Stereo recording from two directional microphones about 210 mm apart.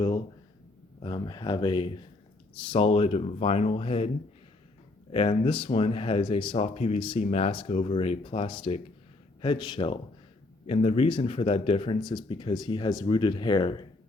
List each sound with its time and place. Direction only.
1.0 s speech: 20° left (ahead or behind)
5.1 s speech: 25° left (ahead or behind)